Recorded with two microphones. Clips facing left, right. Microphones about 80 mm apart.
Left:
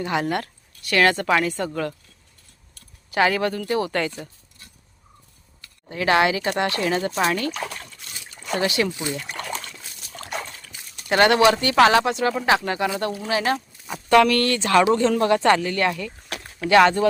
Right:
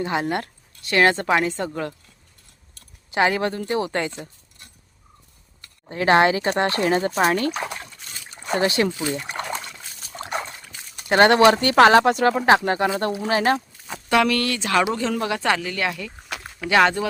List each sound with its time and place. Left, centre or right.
0.0 s speech: right
3.1 s speech: right
5.6 s speech: right
7.6 s trickle: right
8.4 s speech: right
9.0 s speech: right
10.2 s a sound: right
11.1 s speech: right
14.1 s speech: centre